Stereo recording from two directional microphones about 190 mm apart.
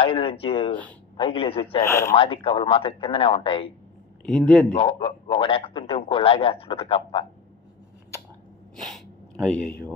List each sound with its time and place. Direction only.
0.0 s a man's voice: 30° left (ahead or behind)
1.8 s speech: 15° left (ahead or behind)
2.1 s a man's voice: 30° left (ahead or behind)
4.3 s speech: 5° left (ahead or behind)
4.7 s a man's voice: 30° left (ahead or behind)
9.5 s speech: 5° left (ahead or behind)